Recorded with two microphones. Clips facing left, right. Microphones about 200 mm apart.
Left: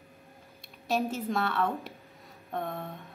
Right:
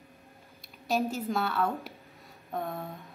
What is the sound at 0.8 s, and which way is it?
A woman's voice, centre (ahead or behind).